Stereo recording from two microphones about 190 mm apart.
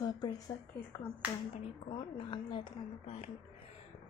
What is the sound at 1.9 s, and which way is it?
A woman's voice, 25° left (ahead or behind).